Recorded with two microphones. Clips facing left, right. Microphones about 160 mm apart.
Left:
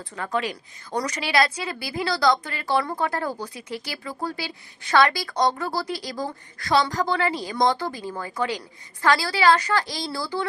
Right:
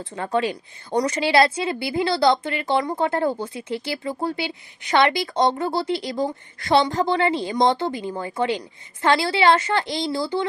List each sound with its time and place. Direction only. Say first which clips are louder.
0.0 s a woman's voice: right 4 dB; 25° right (ahead or behind)